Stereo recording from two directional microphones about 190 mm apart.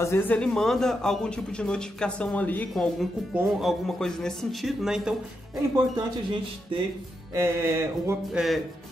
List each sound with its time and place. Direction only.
0.0 s speech: 10° left (ahead or behind)
5.9 s speech: 25° right (ahead or behind)
7.3 s a sound: 15° right (ahead or behind)
8.3 s speech: centre (ahead or behind)